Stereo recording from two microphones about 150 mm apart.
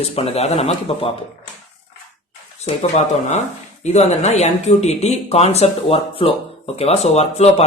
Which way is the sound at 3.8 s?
45° left (ahead or behind).